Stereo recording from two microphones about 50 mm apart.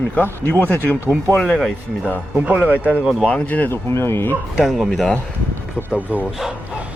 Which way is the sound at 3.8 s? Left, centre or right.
Left.